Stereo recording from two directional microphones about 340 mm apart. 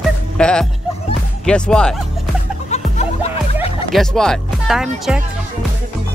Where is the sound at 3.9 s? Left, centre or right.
Centre.